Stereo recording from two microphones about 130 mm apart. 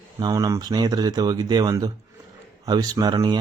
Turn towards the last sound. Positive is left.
turn(degrees=-35)  # may be behind; listen again after turning